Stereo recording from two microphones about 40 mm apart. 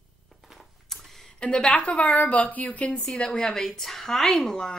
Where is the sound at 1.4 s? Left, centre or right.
Left.